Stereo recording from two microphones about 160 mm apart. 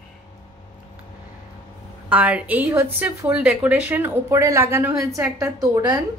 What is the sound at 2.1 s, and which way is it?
A woman's voice, 10° right (ahead or behind).